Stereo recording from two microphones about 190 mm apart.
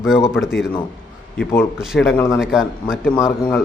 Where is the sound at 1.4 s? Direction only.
10° left (ahead or behind).